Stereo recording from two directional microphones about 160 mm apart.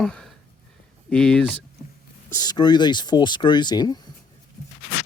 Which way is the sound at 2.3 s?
25° left (ahead or behind).